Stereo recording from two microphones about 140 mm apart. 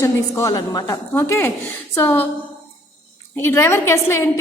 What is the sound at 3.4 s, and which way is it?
Speech, 15° left (ahead or behind).